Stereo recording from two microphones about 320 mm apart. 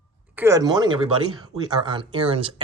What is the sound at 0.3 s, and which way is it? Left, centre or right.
Speech, centre.